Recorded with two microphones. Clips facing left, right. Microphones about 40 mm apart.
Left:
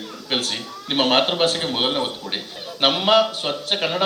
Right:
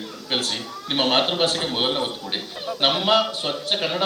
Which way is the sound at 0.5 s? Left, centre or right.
Left.